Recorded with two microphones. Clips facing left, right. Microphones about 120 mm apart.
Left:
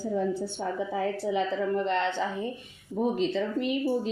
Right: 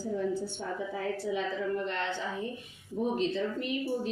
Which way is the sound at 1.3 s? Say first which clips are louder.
Left 5 dB; 90° left.